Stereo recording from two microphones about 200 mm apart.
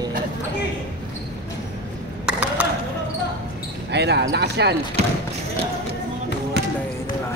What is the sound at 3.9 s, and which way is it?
Speech, 55° right (ahead or behind).